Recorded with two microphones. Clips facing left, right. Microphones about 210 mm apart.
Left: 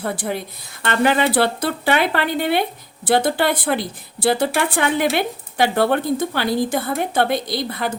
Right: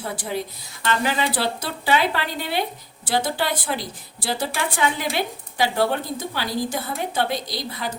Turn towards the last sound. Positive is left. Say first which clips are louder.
# left 6 dB
turn(degrees=55)  # may be behind; listen again after turning